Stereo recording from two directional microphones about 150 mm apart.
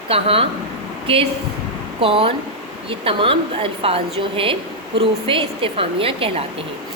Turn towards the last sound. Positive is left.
turn(degrees=-35)  # may be behind; listen again after turning